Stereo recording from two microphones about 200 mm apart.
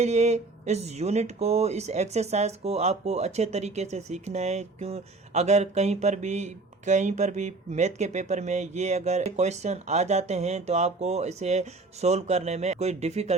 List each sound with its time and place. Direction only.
0.0 s speech: 35° right (ahead or behind)